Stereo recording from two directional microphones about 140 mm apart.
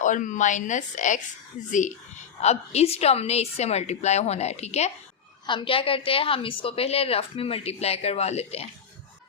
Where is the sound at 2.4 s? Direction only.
50° left (ahead or behind).